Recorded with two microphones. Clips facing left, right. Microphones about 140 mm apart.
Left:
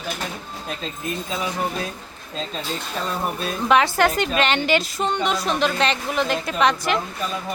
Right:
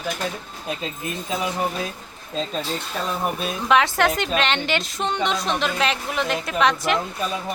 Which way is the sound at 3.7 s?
Centre (ahead or behind).